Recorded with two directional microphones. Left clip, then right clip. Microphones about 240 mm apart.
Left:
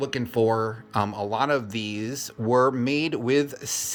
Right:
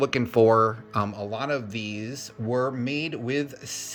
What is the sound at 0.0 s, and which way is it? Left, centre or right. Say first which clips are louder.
Speech: right 4 dB; centre.